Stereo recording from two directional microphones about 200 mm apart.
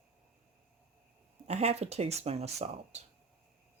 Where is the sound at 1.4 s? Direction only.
30° right (ahead or behind).